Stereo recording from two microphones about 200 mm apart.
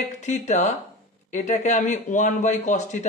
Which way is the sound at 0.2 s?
35° left (ahead or behind).